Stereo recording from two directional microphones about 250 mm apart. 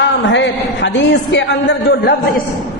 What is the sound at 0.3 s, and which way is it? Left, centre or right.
A man's voice, left.